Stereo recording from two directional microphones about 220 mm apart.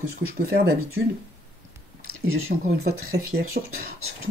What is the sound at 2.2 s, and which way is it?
Speech, 70° right (ahead or behind).